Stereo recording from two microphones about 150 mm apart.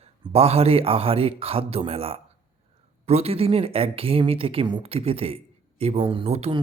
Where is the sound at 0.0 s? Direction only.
40° right (ahead or behind).